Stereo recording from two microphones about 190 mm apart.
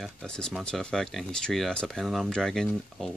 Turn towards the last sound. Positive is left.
turn(degrees=0)  # may be behind; listen again after turning